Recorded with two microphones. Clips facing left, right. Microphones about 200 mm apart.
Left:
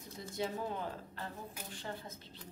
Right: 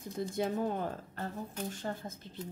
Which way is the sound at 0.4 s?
50° right (ahead or behind).